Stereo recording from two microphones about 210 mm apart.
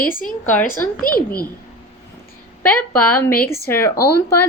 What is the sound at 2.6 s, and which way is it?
Speech, 5° left (ahead or behind).